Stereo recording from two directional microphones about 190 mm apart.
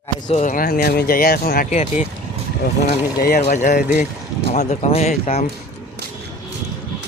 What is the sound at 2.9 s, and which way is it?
Speech, 45° left (ahead or behind).